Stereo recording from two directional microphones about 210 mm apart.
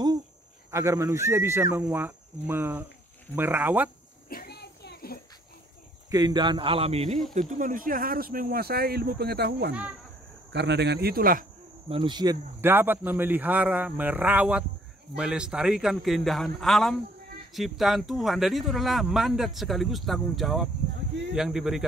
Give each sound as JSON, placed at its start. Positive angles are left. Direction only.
{"t": 0.7, "sound": "speech", "side_deg": -15}
{"t": 4.3, "sound": "a sound", "side_deg": 45}
{"t": 6.0, "sound": "speech", "side_deg": -20}
{"t": 11.9, "sound": "speech", "side_deg": -20}